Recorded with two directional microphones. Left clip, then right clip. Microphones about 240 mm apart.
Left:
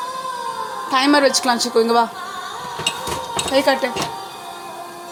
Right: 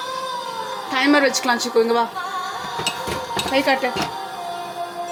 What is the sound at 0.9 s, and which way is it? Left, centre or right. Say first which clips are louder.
A woman's voice: left 2 dB; centre.